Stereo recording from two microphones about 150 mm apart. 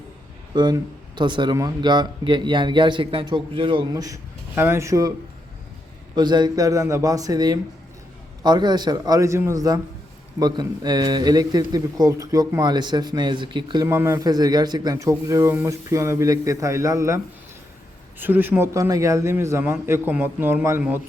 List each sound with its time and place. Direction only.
0.5 s a man's voice: 30° right (ahead or behind)
6.1 s speech: 30° right (ahead or behind)
13.8 s speech: 20° right (ahead or behind)
18.2 s a man's voice: 15° right (ahead or behind)